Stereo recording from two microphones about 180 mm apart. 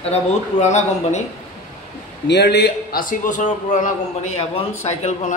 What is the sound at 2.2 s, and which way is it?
A man's voice, 70° left (ahead or behind).